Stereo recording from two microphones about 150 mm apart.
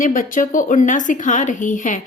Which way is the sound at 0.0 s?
65° left (ahead or behind).